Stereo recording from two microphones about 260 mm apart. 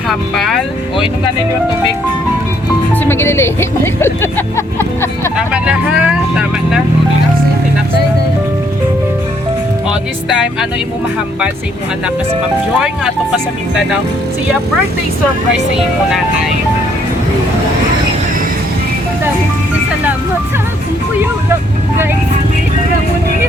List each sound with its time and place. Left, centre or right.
0.1 s speech: centre
2.9 s speech: centre
5.5 s speech: centre
9.9 s speech: centre
21.2 s vehicle: centre